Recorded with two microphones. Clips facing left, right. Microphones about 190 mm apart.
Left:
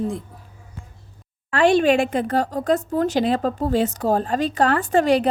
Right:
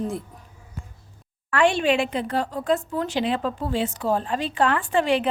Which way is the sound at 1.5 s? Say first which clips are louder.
Left 4 dB; 35° left (ahead or behind).